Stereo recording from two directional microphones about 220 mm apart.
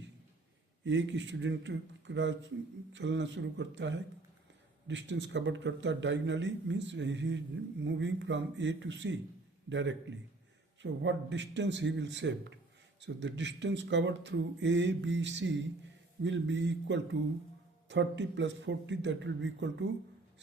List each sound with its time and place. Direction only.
0.9 s a man's voice: 55° right (ahead or behind)